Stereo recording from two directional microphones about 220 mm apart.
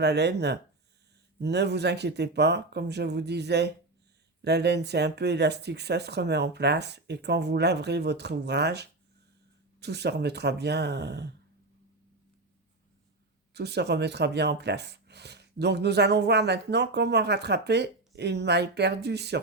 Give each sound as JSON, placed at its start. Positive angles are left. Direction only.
{"t": 0.0, "sound": "speech", "side_deg": -50}
{"t": 13.5, "sound": "speech", "side_deg": -50}